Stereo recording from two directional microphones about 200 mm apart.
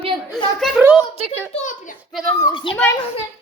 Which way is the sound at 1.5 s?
40° left (ahead or behind).